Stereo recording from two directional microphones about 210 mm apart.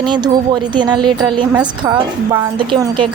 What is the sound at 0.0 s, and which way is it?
A woman's voice, 20° right (ahead or behind).